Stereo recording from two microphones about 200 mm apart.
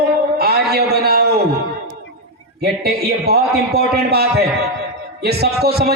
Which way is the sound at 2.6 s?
50° right (ahead or behind).